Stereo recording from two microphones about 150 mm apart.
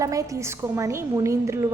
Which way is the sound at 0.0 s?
20° right (ahead or behind).